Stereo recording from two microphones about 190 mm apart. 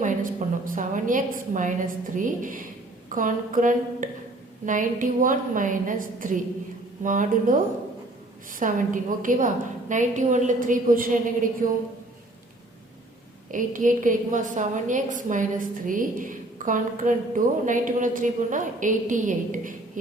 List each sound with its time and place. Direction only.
0.0 s a woman's voice: 45° right (ahead or behind)
13.5 s a woman's voice: 45° right (ahead or behind)